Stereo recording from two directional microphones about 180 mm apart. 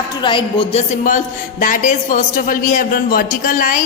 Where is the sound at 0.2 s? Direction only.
25° left (ahead or behind).